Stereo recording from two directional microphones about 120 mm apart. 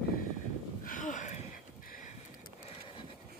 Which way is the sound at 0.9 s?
90° left.